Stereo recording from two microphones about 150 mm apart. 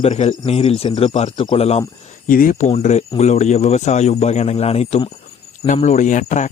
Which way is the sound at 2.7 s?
45° left (ahead or behind).